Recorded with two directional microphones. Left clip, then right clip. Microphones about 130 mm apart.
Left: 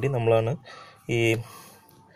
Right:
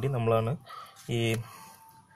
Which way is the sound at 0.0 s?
15° left (ahead or behind).